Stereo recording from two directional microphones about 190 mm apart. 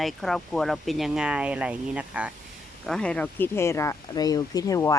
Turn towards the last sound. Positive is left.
turn(degrees=15)  # may be behind; listen again after turning